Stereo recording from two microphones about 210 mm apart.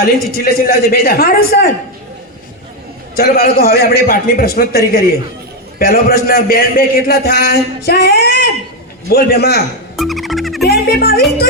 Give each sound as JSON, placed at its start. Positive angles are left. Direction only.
{"t": 0.0, "sound": "a man's voice", "side_deg": 45}
{"t": 3.2, "sound": "a man's voice", "side_deg": 45}
{"t": 10.0, "sound": "music", "side_deg": 0}